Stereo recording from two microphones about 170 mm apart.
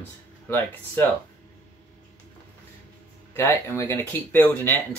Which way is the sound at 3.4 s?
15° left (ahead or behind).